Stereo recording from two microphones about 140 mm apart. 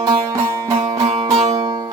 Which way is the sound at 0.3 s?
20° right (ahead or behind).